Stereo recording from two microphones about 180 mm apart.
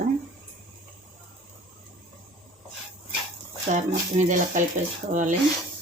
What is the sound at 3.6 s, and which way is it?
Speech, 40° right (ahead or behind).